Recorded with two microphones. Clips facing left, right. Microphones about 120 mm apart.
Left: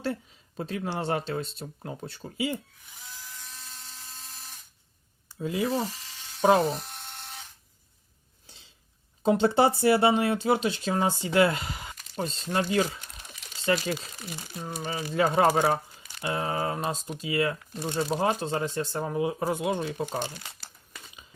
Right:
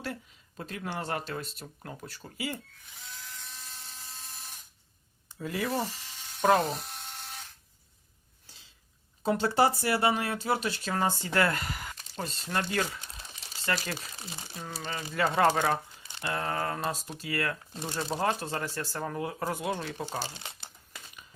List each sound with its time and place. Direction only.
0.0 s speech: 30° left (ahead or behind)
3.0 s a sound: centre (ahead or behind)
5.4 s speech: 20° left (ahead or behind)
6.5 s electric toothbrush: centre (ahead or behind)
8.4 s a sound: 25° left (ahead or behind)
9.2 s speech: 25° left (ahead or behind)
13.2 s crumpling: 30° right (ahead or behind)
14.2 s speech: 25° right (ahead or behind)
14.6 s speech: 15° left (ahead or behind)
20.3 s crumpling: 25° right (ahead or behind)